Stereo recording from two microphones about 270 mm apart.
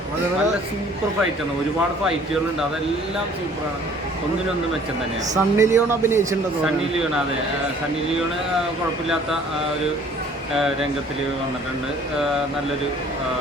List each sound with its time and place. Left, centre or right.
5.3 s speech: centre